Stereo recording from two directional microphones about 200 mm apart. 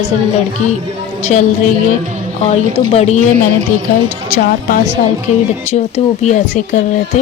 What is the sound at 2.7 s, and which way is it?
Speech, 30° left (ahead or behind).